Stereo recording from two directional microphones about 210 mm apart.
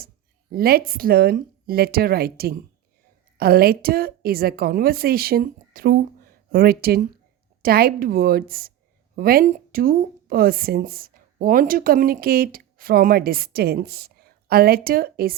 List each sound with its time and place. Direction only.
0.5 s a woman's voice: 45° right (ahead or behind)